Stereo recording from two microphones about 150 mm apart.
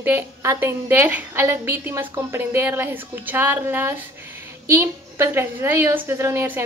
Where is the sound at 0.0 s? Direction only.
15° right (ahead or behind).